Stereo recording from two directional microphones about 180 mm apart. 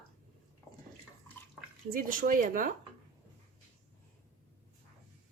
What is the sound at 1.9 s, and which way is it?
Speech, 50° right (ahead or behind).